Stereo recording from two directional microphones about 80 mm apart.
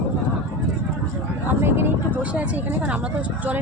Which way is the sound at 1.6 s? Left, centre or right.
Right.